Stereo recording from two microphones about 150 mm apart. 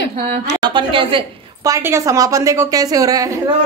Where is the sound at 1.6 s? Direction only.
20° right (ahead or behind).